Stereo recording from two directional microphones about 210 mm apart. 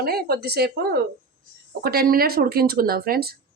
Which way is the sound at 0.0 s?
45° right (ahead or behind).